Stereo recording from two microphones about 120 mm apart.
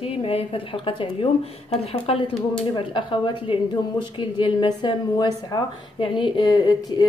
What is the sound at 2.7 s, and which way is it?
A woman's voice, 40° left (ahead or behind).